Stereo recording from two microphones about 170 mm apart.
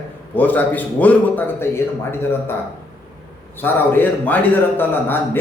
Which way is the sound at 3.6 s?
10° left (ahead or behind).